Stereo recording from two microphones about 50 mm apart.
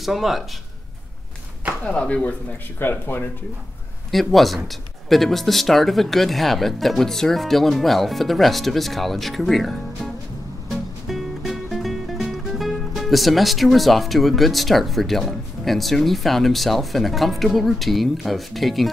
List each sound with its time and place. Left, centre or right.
0.0 s speech: centre
1.9 s speech: left
2.8 s speech: left
4.1 s speech: centre
11.1 s music: centre